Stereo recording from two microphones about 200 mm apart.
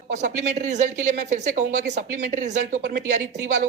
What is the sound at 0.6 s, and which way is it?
Speech, 35° right (ahead or behind).